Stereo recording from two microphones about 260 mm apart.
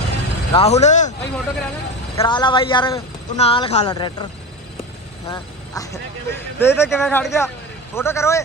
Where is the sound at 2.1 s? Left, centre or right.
Centre.